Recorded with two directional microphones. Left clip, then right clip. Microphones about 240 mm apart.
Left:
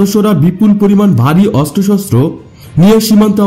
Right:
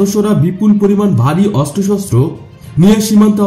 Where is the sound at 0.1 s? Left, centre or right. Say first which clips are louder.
Left 2 dB; left.